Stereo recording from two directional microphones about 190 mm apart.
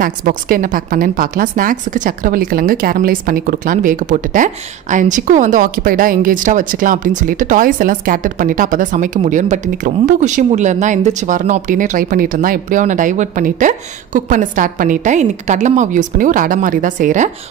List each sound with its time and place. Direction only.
0.0 s a woman's voice: 45° right (ahead or behind)